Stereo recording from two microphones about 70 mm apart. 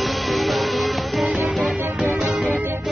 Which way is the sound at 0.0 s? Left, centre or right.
Centre.